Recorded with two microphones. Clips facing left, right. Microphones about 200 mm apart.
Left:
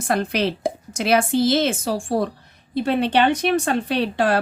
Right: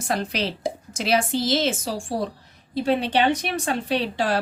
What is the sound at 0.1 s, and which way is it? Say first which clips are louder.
Speech: left 5 dB; 55° left (ahead or behind).